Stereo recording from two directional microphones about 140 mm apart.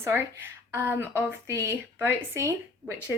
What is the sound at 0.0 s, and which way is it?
A woman's voice, 15° right (ahead or behind).